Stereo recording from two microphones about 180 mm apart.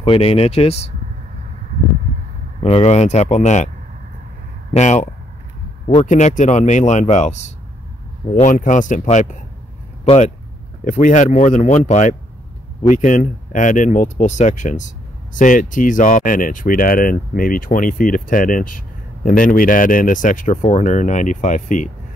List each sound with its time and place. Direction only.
0.0 s speech: 30° left (ahead or behind)
2.6 s speech: 35° left (ahead or behind)
4.7 s speech: 40° left (ahead or behind)